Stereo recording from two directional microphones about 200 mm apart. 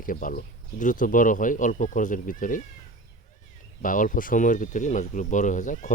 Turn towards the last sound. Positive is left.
turn(degrees=40)  # may be behind; listen again after turning